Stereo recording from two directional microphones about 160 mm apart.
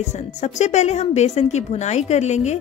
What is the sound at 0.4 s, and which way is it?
Speech, 45° left (ahead or behind).